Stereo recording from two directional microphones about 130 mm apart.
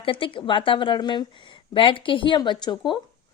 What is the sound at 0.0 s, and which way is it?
A woman's voice, 40° left (ahead or behind).